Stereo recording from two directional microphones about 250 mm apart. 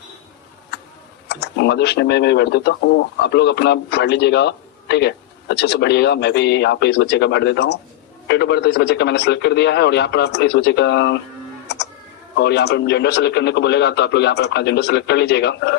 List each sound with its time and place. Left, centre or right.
1.3 s speech: left
12.4 s speech: left